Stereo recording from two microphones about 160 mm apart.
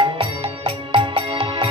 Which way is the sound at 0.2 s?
35° right (ahead or behind).